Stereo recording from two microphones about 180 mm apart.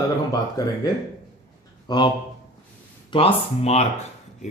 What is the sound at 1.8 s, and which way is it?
Speech, 25° left (ahead or behind).